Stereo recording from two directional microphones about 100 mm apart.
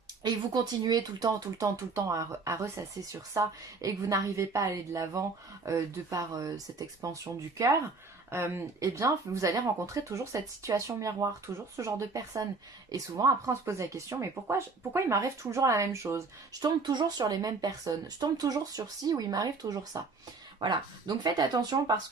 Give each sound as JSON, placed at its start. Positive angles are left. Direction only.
{"t": 0.2, "sound": "speech", "side_deg": -45}
{"t": 8.3, "sound": "a woman's voice", "side_deg": -25}
{"t": 16.6, "sound": "speech", "side_deg": -45}
{"t": 20.6, "sound": "speech", "side_deg": -50}